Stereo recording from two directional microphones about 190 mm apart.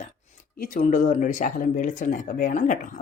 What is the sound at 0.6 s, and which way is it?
Speech, 45° left (ahead or behind).